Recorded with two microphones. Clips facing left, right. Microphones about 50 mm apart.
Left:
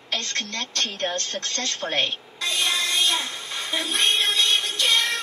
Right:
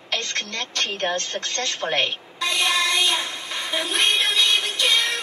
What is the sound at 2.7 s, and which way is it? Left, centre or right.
Music, right.